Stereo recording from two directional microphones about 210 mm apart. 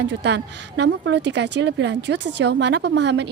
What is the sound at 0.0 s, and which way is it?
A woman's voice, 55° right (ahead or behind).